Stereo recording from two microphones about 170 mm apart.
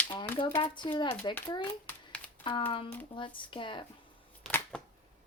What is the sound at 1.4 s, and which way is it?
Speech, 30° left (ahead or behind).